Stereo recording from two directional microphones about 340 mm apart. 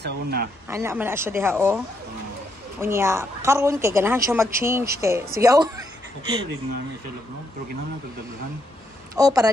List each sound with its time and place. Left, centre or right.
0.0 s speech: right
0.7 s a woman's voice: centre
2.8 s a woman's voice: centre
9.1 s a woman's voice: centre